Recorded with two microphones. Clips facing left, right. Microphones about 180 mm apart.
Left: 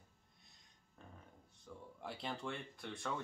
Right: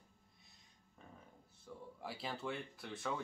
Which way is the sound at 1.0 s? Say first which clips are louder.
Even; centre (ahead or behind).